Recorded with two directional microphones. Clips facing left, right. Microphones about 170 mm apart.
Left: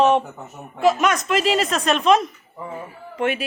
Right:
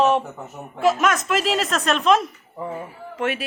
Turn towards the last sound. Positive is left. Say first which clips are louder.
# left 2 dB
turn(degrees=0)  # may be behind; listen again after turning